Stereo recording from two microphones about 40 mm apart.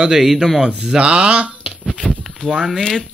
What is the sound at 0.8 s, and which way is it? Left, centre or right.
Speech, right.